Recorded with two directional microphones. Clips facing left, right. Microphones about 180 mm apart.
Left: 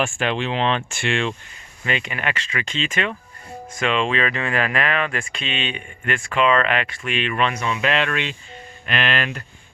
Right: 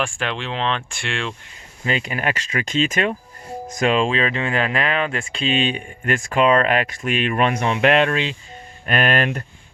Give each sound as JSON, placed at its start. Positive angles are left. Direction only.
{"t": 0.0, "sound": "speech", "side_deg": 5}
{"t": 1.8, "sound": "speech", "side_deg": -35}
{"t": 8.1, "sound": "speech", "side_deg": -35}